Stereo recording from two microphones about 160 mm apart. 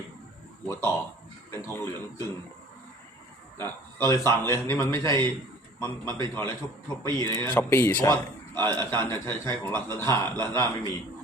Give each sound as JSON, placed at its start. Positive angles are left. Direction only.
{"t": 0.7, "sound": "a man's voice", "side_deg": 15}
{"t": 3.6, "sound": "a man's voice", "side_deg": 15}